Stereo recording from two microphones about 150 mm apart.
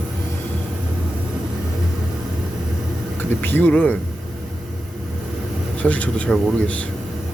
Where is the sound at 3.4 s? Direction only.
10° left (ahead or behind).